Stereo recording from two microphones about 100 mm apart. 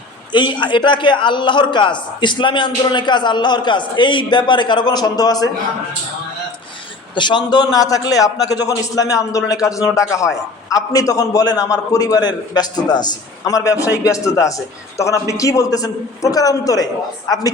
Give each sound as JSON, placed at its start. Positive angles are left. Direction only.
{"t": 0.3, "sound": "a man's voice", "side_deg": 50}
{"t": 7.2, "sound": "a man's voice", "side_deg": 50}